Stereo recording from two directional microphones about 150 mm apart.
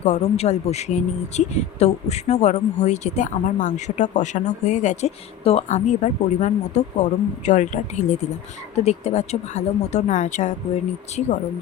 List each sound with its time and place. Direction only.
0.0 s speech: 50° left (ahead or behind)